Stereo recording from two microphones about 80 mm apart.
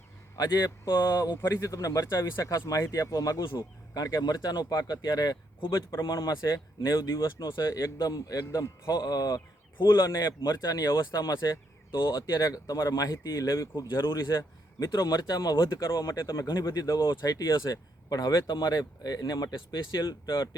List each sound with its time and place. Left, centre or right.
0.3 s a man's voice: left
0.9 s speech: left
5.5 s speech: left
6.1 s speech: left
7.3 s speech: left
7.7 s speech: left
8.8 s speech: left
9.8 s speech: left
10.1 s speech: left
11.9 s speech: left
12.4 s speech: left
14.1 s speech: left
15.8 s speech: left
16.5 s speech: left